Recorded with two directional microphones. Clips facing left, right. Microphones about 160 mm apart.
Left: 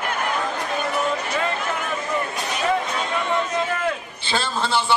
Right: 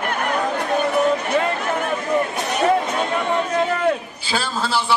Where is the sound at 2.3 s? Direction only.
55° right (ahead or behind).